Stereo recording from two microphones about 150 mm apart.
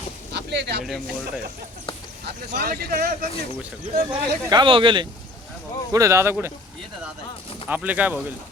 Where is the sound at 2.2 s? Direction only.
90° right.